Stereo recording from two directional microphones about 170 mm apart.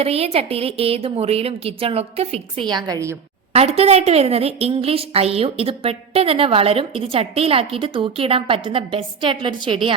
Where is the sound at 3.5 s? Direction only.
35° right (ahead or behind).